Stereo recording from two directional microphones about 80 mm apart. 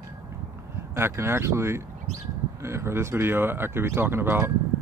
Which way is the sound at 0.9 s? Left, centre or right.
Right.